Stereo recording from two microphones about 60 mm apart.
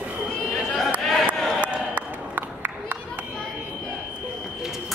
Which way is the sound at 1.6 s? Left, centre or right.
Right.